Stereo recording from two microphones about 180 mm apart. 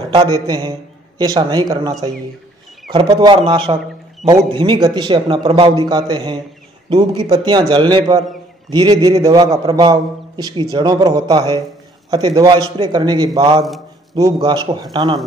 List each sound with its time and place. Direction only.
0.1 s a man's voice: 25° right (ahead or behind)